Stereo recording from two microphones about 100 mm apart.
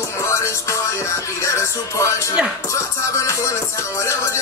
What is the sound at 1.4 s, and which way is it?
Music, 30° left (ahead or behind).